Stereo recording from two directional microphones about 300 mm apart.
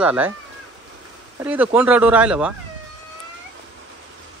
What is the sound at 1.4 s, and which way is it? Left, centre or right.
Speech, centre.